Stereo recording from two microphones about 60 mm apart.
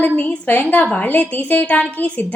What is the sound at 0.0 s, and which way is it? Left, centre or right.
A woman's voice, left.